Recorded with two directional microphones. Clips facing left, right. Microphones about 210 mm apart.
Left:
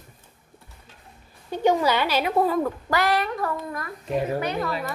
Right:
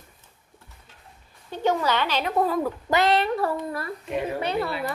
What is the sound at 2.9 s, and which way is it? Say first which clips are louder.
Speech: right 5 dB; 25° right (ahead or behind).